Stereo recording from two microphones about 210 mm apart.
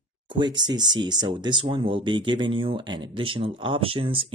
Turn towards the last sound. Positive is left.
turn(degrees=-25)  # may be behind; listen again after turning